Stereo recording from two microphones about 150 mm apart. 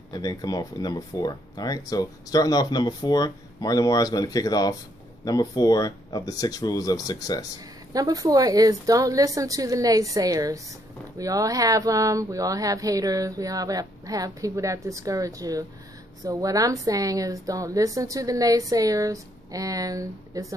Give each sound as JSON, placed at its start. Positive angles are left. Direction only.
{"t": 0.1, "sound": "speech", "side_deg": 25}
{"t": 7.9, "sound": "speech", "side_deg": -25}